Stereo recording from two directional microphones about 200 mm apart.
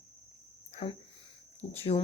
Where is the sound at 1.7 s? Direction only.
30° left (ahead or behind).